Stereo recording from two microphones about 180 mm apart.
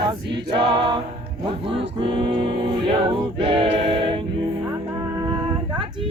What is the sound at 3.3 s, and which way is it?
Choir, 30° right (ahead or behind).